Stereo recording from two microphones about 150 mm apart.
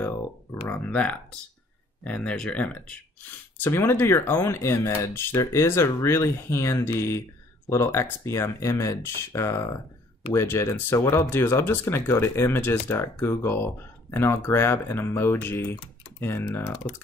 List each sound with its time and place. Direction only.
0.7 s speech: 10° left (ahead or behind)